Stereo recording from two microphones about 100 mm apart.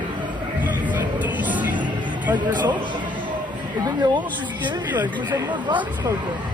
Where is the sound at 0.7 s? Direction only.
15° right (ahead or behind).